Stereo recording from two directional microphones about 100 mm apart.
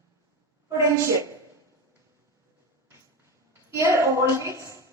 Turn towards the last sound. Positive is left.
turn(degrees=-30)  # may be behind; listen again after turning